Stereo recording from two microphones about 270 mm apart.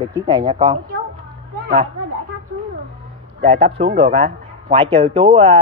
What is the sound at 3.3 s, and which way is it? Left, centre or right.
A man's voice, right.